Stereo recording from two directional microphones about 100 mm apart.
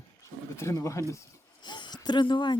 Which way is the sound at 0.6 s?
30° left (ahead or behind).